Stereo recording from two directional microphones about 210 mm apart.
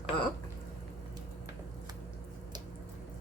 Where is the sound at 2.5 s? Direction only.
20° right (ahead or behind).